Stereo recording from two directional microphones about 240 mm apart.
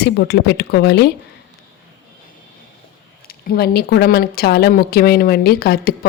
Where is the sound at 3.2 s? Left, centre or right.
Left.